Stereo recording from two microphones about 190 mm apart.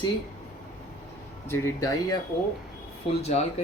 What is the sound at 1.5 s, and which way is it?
Speech, 15° left (ahead or behind).